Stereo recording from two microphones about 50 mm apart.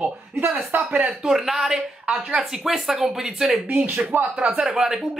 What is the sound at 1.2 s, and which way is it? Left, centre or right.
Speech, centre.